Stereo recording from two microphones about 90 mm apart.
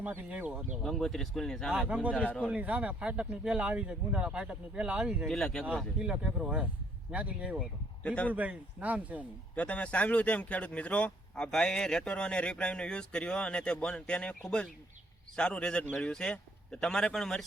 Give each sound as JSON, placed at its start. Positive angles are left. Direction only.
{"t": 0.0, "sound": "speech", "side_deg": -20}
{"t": 0.8, "sound": "speech", "side_deg": 5}
{"t": 2.5, "sound": "speech", "side_deg": -15}
{"t": 5.3, "sound": "speech", "side_deg": 5}
{"t": 5.7, "sound": "speech", "side_deg": -10}
{"t": 8.0, "sound": "speech", "side_deg": 15}
{"t": 8.3, "sound": "speech", "side_deg": -15}
{"t": 9.6, "sound": "speech", "side_deg": 15}